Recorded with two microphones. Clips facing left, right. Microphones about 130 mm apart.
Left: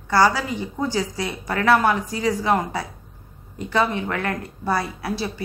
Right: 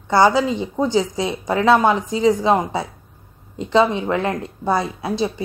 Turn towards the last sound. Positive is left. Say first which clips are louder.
# right 5 dB
turn(degrees=-20)  # may be behind; listen again after turning